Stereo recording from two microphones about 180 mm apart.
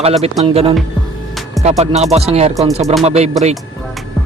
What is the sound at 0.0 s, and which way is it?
Speech, 35° right (ahead or behind).